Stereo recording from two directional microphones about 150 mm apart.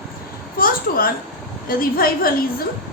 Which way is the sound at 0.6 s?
75° left (ahead or behind).